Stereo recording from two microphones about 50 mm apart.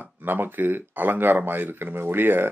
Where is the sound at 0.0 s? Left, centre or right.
Right.